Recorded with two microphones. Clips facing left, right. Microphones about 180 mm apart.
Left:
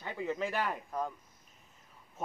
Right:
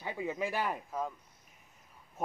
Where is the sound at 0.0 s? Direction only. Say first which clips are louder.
Even; 10° right (ahead or behind).